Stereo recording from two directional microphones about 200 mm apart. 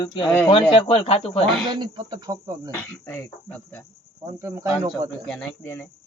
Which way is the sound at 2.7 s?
10° left (ahead or behind).